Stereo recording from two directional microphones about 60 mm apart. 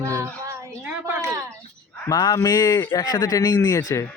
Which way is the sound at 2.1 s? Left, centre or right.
Left.